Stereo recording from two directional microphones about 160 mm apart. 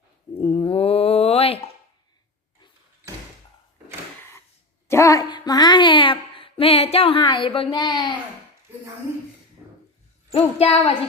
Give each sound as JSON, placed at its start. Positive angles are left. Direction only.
{"t": 0.3, "sound": "dog", "side_deg": 30}
{"t": 4.9, "sound": "a sound", "side_deg": 20}
{"t": 10.3, "sound": "speech", "side_deg": 35}